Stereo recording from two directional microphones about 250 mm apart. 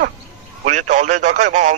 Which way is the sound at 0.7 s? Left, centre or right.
Right.